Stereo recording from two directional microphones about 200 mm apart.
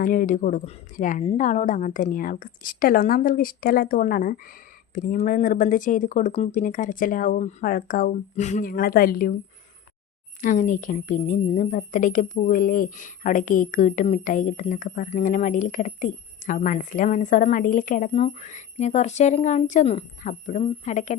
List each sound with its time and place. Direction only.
0.0 s a woman's voice: 45° left (ahead or behind)
10.4 s a woman's voice: 40° left (ahead or behind)